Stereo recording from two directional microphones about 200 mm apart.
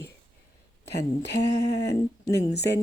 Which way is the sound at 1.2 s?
55° left (ahead or behind).